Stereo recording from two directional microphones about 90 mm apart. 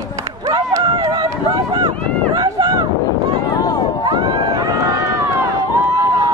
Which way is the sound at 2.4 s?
45° right (ahead or behind).